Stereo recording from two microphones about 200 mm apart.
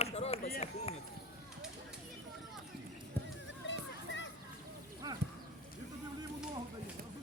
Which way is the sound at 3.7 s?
65° left (ahead or behind).